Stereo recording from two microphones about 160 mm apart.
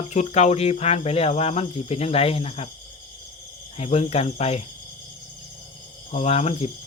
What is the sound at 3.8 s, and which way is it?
Speech, 40° left (ahead or behind).